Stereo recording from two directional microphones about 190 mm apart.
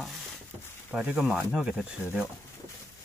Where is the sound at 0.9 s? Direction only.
5° right (ahead or behind).